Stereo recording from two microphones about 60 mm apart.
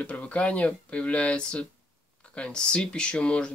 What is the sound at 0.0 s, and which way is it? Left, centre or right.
Speech, left.